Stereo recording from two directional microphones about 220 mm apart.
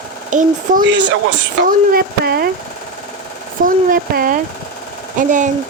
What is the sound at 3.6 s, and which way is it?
Speech, 40° right (ahead or behind).